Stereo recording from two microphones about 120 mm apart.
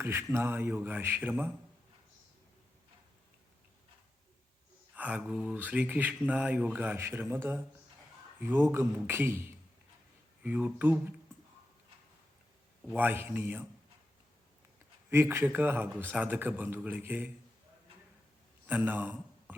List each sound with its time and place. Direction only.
0.0 s speech: 20° right (ahead or behind)
4.9 s speech: 10° right (ahead or behind)
13.0 s speech: 15° right (ahead or behind)
15.1 s speech: 20° right (ahead or behind)
18.6 s a sound: 15° right (ahead or behind)